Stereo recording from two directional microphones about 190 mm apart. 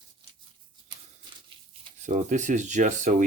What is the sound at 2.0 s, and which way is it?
Speech, 40° right (ahead or behind).